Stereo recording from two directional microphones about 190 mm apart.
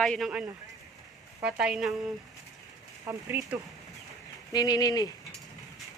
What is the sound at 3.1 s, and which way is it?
Speech, 10° right (ahead or behind).